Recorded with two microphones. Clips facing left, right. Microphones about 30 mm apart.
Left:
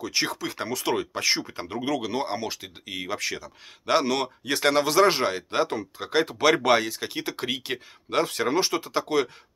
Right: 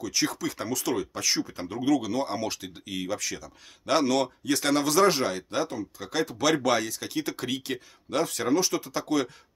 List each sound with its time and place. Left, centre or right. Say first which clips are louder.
0.0 s speech: left 1 dB; left
2.3 s speech: even; centre
3.2 s speech: left 4 dB; left
3.8 s speech: left 1 dB; centre